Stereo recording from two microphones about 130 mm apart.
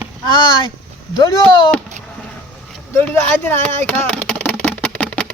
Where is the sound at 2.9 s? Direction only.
15° left (ahead or behind).